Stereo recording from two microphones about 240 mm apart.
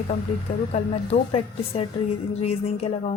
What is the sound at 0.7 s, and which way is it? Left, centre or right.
Speech, left.